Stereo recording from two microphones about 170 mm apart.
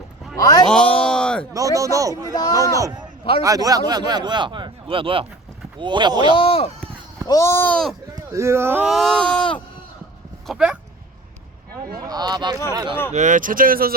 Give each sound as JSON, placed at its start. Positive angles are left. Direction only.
{"t": 0.7, "sound": "a sound", "side_deg": 5}
{"t": 1.5, "sound": "a man's voice", "side_deg": -20}
{"t": 2.3, "sound": "speech", "side_deg": 20}
{"t": 2.7, "sound": "a man's voice", "side_deg": -20}
{"t": 6.3, "sound": "speech", "side_deg": 35}
{"t": 7.3, "sound": "speech", "side_deg": 15}
{"t": 8.3, "sound": "speech", "side_deg": -15}
{"t": 8.9, "sound": "speech", "side_deg": 0}
{"t": 12.0, "sound": "a man's voice", "side_deg": -25}
{"t": 13.1, "sound": "speech", "side_deg": -50}